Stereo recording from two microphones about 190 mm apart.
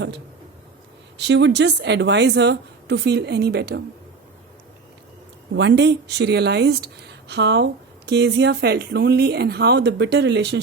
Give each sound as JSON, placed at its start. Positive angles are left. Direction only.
{"t": 1.2, "sound": "speech", "side_deg": -70}
{"t": 5.5, "sound": "speech", "side_deg": -65}